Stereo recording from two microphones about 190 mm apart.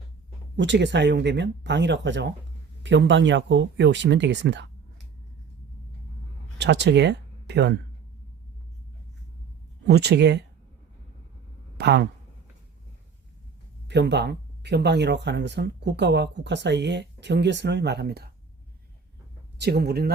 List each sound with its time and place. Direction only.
0.5 s speech: 70° right (ahead or behind)
6.6 s speech: 65° right (ahead or behind)
9.8 s speech: 60° right (ahead or behind)
11.8 s speech: 65° right (ahead or behind)
13.8 s speech: 65° right (ahead or behind)
19.5 s speech: 60° right (ahead or behind)